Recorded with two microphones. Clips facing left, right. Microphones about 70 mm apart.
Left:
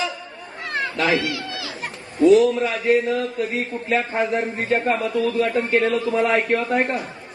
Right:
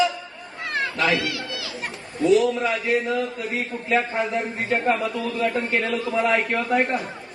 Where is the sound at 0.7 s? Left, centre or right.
Left.